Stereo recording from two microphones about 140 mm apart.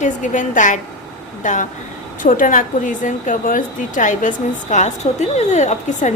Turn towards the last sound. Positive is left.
turn(degrees=60)  # may be behind; listen again after turning